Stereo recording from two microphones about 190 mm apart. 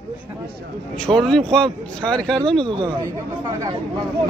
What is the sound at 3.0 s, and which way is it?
Speech, 15° right (ahead or behind).